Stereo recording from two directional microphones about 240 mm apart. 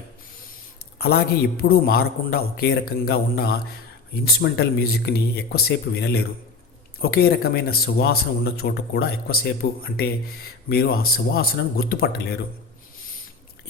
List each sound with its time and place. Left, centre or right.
0.9 s speech: left